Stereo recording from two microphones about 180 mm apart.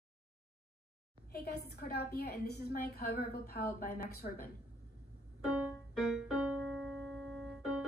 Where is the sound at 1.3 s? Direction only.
60° left (ahead or behind).